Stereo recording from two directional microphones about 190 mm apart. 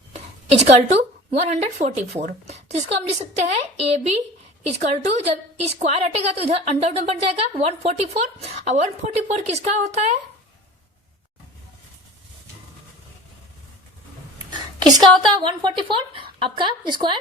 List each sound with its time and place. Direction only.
0.7 s a woman's voice: 35° right (ahead or behind)
14.8 s a woman's voice: 20° right (ahead or behind)